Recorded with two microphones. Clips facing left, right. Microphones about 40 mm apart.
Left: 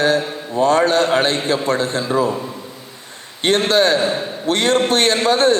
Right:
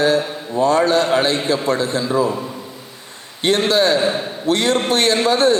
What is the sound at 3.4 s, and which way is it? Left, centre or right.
A man's voice, left.